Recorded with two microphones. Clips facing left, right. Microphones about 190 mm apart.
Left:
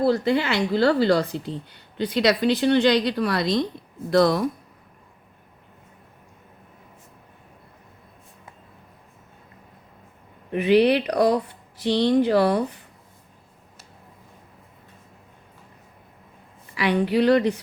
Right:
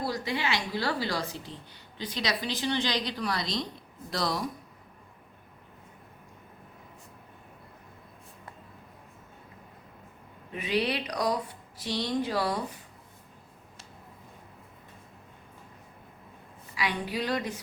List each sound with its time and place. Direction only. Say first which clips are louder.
0.0 s a woman's voice: left 11 dB; 55° left (ahead or behind)
10.5 s a woman's voice: left 12 dB; 60° left (ahead or behind)
16.7 s a woman's voice: left 11 dB; 65° left (ahead or behind)